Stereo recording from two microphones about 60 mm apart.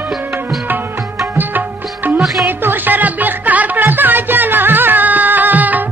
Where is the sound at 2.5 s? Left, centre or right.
Right.